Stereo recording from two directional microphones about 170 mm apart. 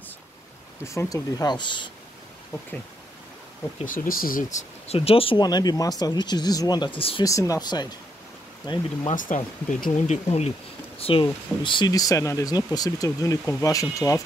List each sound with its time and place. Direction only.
0.8 s speech: 20° left (ahead or behind)
3.8 s speech: 50° left (ahead or behind); by 7.2 s 30° left (ahead or behind)
7.2 s speech: 20° left (ahead or behind)
9.1 s speech: 50° left (ahead or behind); by 14.2 s 20° left (ahead or behind)